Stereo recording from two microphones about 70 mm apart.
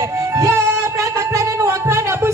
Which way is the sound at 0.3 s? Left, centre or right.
Right.